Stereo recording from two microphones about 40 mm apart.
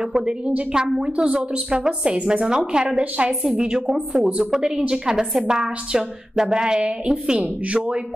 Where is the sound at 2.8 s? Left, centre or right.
Right; by 7.4 s centre.